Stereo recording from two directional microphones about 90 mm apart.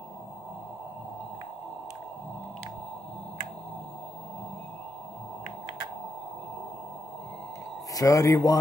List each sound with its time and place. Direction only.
7.9 s a man's voice: 40° left (ahead or behind)